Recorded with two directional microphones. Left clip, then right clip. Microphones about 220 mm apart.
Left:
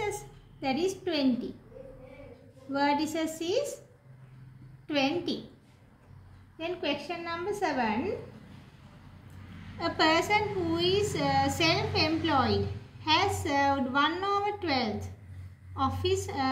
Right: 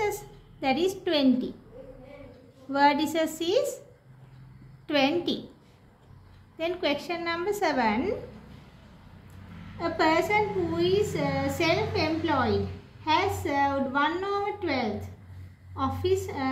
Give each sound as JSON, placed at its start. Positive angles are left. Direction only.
{"t": 0.6, "sound": "a woman's voice", "side_deg": -30}
{"t": 2.7, "sound": "a woman's voice", "side_deg": -30}
{"t": 4.8, "sound": "a woman's voice", "side_deg": -30}
{"t": 6.6, "sound": "a woman's voice", "side_deg": -35}
{"t": 9.8, "sound": "a woman's voice", "side_deg": -5}